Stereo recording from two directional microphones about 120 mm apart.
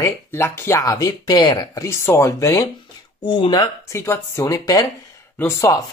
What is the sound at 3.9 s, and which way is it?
Speech, 25° left (ahead or behind).